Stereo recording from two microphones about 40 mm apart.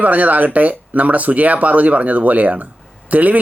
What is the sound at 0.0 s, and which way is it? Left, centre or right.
Speech, right.